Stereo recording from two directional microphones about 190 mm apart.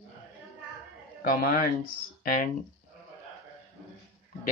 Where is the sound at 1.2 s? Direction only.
50° left (ahead or behind).